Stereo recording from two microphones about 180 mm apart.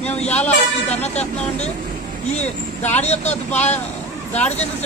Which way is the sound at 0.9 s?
35° left (ahead or behind).